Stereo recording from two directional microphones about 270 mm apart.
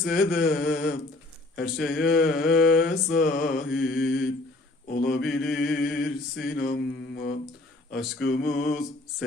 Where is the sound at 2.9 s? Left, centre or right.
Left.